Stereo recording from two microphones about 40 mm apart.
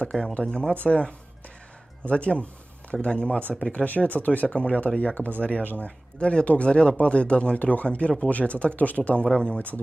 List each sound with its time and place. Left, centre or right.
0.1 s speech: centre; by 9.2 s left
9.2 s speech: left